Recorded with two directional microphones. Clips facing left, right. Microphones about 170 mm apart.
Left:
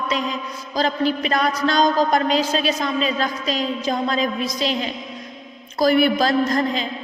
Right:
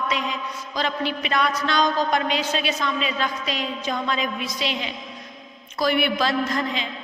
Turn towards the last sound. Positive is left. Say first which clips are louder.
# left 5 dB
turn(degrees=40)  # may be behind; listen again after turning